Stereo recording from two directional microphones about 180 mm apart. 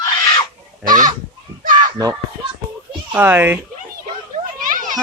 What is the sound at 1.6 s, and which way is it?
Children playing, 50° right (ahead or behind).